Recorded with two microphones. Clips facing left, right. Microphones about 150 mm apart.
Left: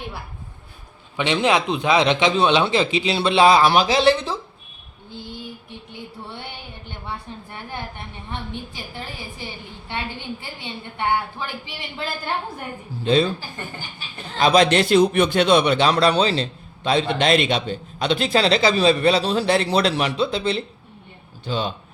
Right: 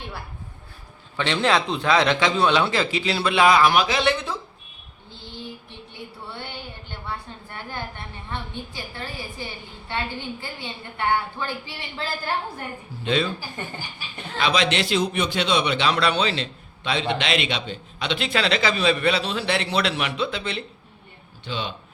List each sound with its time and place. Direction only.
1.1 s a man's voice: 15° left (ahead or behind); by 4.4 s 30° left (ahead or behind)
7.7 s a man's voice: 20° left (ahead or behind)
10.9 s speech: 15° left (ahead or behind)
13.1 s a man's voice: 35° left (ahead or behind)
14.3 s a man's voice: 45° left (ahead or behind)